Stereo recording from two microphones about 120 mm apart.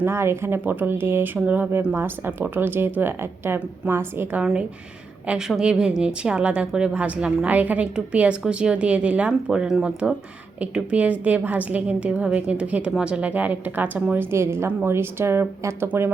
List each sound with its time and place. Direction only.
0.0 s speech: 20° right (ahead or behind)